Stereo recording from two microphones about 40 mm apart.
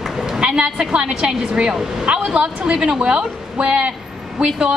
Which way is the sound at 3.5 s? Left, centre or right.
Right.